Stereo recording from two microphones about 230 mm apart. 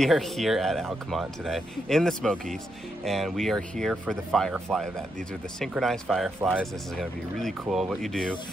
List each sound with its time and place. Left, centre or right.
0.0 s speech: centre